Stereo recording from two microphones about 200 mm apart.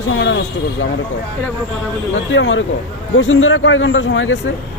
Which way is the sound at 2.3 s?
70° left (ahead or behind).